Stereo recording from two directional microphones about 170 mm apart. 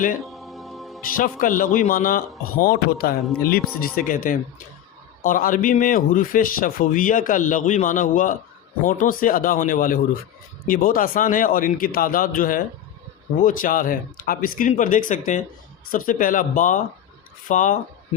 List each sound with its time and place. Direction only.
0.2 s music: centre (ahead or behind)
1.1 s a man's voice: 55° left (ahead or behind)